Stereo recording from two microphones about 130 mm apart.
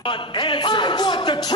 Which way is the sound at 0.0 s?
40° left (ahead or behind).